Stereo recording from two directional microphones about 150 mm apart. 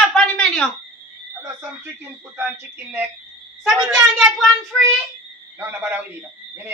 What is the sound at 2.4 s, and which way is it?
Speech, 15° right (ahead or behind).